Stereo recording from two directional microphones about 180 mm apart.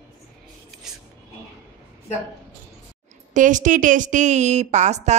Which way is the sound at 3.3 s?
45° right (ahead or behind).